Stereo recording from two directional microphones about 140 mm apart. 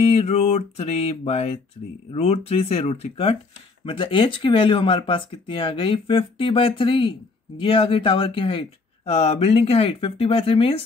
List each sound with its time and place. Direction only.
0.0 s mantra: 45° left (ahead or behind)
3.8 s speech: 40° left (ahead or behind)